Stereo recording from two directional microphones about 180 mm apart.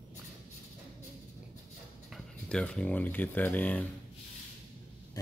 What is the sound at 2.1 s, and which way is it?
Speech, 5° left (ahead or behind).